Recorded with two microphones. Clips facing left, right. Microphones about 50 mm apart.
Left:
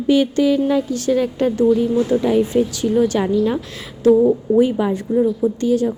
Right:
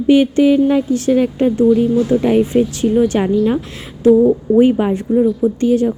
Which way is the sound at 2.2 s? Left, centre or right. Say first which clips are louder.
Right 3 dB; right.